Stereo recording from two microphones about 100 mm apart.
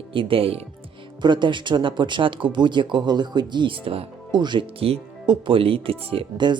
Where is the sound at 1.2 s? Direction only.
50° right (ahead or behind).